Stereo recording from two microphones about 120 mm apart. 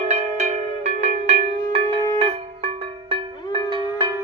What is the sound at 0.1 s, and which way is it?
Music, 70° right (ahead or behind).